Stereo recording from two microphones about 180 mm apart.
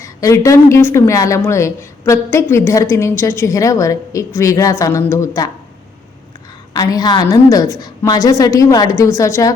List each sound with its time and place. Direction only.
0.0 s a woman's voice: 15° left (ahead or behind)
6.7 s a woman's voice: 20° left (ahead or behind)